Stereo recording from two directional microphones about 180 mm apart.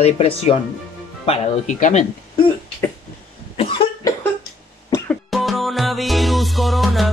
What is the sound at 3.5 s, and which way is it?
Cough, 30° left (ahead or behind).